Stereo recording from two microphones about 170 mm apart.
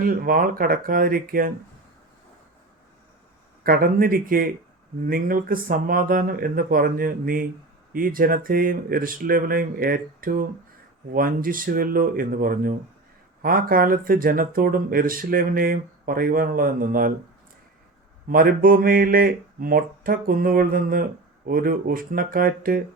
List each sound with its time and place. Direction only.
0.0 s speech: 60° right (ahead or behind)
3.6 s speech: 60° right (ahead or behind)
18.3 s speech: 60° right (ahead or behind)